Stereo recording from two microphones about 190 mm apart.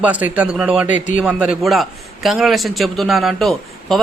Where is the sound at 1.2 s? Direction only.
5° right (ahead or behind).